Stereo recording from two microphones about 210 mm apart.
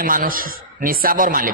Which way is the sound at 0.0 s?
40° right (ahead or behind).